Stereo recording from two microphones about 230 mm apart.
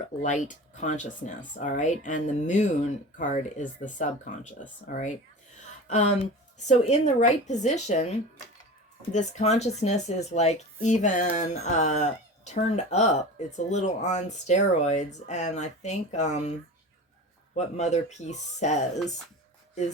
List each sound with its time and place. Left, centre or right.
0.2 s speech: left
9.1 s speech: left